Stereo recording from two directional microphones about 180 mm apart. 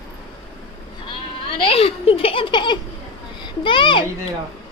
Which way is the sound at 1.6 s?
30° left (ahead or behind).